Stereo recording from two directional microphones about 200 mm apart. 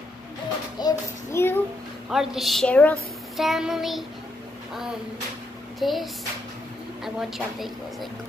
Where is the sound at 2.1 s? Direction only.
Centre (ahead or behind).